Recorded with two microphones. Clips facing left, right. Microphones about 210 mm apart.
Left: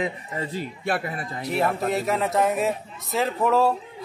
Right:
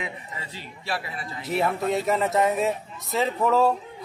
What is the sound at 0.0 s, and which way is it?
A man's voice, 45° left (ahead or behind).